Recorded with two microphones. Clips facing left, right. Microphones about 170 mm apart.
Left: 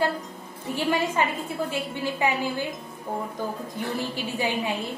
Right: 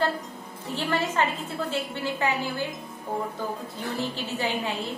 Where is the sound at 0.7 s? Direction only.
10° left (ahead or behind).